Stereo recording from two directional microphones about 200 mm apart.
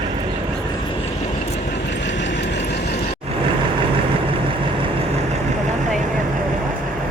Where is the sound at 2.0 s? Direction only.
60° left (ahead or behind).